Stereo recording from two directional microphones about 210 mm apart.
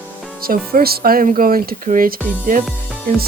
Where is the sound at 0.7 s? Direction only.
45° right (ahead or behind).